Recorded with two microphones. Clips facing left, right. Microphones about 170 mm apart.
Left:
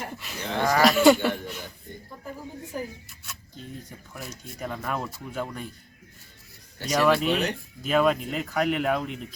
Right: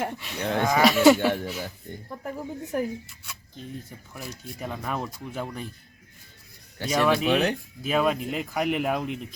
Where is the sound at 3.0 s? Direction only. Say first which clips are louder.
Even; centre (ahead or behind).